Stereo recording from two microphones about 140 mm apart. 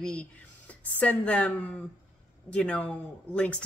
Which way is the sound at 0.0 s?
10° left (ahead or behind).